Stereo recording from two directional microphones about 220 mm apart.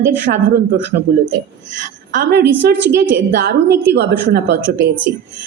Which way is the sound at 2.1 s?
50° right (ahead or behind).